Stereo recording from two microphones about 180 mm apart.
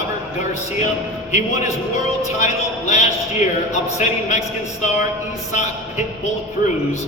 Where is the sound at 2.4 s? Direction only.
40° left (ahead or behind).